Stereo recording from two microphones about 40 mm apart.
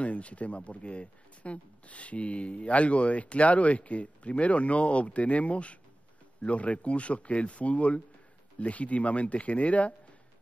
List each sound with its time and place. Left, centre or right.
0.0 s speech: left